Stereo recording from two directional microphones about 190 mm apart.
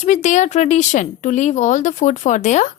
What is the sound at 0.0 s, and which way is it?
A woman's voice, 40° left (ahead or behind).